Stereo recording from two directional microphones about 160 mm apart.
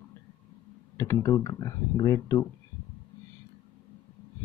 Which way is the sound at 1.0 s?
20° left (ahead or behind).